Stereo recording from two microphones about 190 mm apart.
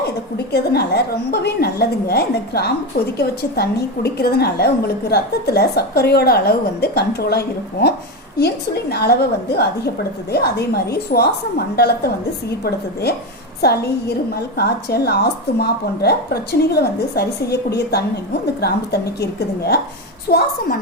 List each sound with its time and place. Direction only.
0.0 s a woman's voice: 60° left (ahead or behind)
14.5 s a woman's voice: 55° left (ahead or behind)